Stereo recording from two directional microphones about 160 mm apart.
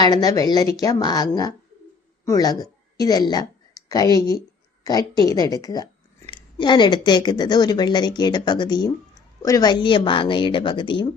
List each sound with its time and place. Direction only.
0.0 s a woman's voice: 25° left (ahead or behind)